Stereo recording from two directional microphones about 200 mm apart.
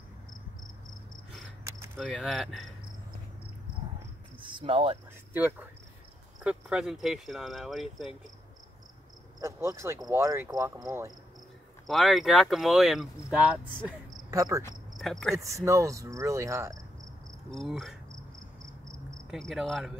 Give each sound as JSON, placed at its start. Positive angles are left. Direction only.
{"t": 2.0, "sound": "speech", "side_deg": 0}
{"t": 4.4, "sound": "a sound", "side_deg": -25}
{"t": 5.3, "sound": "speech", "side_deg": -10}
{"t": 9.4, "sound": "speech", "side_deg": -15}
{"t": 11.9, "sound": "speech", "side_deg": 0}
{"t": 13.8, "sound": "cricket", "side_deg": -15}
{"t": 15.0, "sound": "speech", "side_deg": 0}
{"t": 15.3, "sound": "speech", "side_deg": -15}
{"t": 17.5, "sound": "speech", "side_deg": 0}
{"t": 19.3, "sound": "speech", "side_deg": 0}